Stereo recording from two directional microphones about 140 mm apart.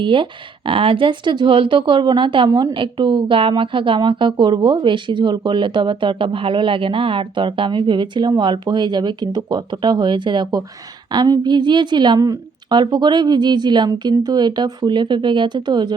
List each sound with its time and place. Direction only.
0.0 s speech: 35° right (ahead or behind)